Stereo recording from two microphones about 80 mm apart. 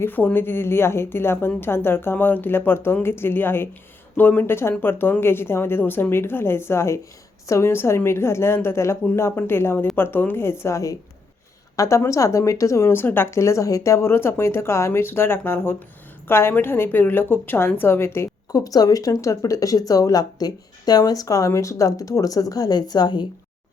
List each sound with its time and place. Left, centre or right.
0.0 s a woman's voice: left
18.5 s speech: left